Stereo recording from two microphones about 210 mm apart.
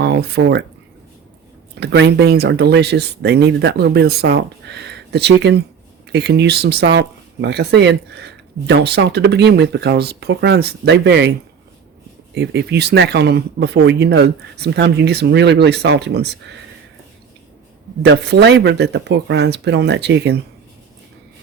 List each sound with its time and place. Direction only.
0.0 s speech: 50° right (ahead or behind)
1.8 s speech: 55° right (ahead or behind)
12.3 s speech: 50° right (ahead or behind)
18.1 s speech: 55° right (ahead or behind)